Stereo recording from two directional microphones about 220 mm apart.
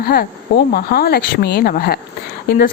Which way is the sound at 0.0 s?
45° left (ahead or behind).